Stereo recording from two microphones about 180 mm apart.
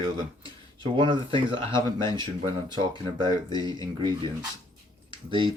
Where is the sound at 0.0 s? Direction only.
30° right (ahead or behind).